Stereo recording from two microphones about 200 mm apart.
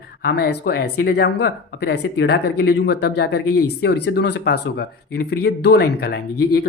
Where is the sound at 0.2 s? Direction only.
50° left (ahead or behind).